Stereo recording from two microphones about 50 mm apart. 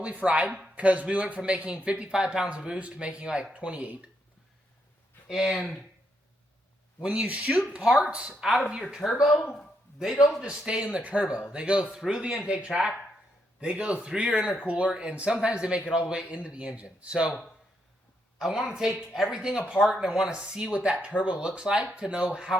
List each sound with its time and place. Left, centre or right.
0.0 s speech: right
5.3 s speech: centre
7.0 s speech: centre
8.4 s speech: centre
9.0 s speech: left
10.0 s speech: centre
10.8 s speech: right
18.3 s speech: centre